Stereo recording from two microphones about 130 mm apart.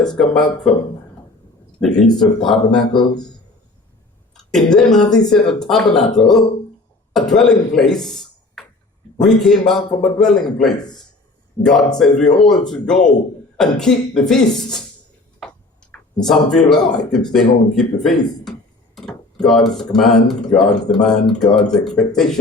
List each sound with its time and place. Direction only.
0.2 s speech: 5° left (ahead or behind)
1.8 s speech: 5° left (ahead or behind)
2.8 s speech: 35° left (ahead or behind)
4.4 s speech: 5° left (ahead or behind)